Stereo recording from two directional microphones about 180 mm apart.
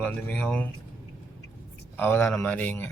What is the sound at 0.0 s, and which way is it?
Speech, 10° left (ahead or behind).